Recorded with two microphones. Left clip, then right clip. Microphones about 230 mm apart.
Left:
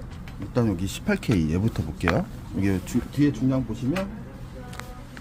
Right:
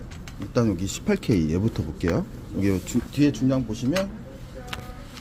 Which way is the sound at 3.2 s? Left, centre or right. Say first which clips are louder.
Right 2 dB; centre.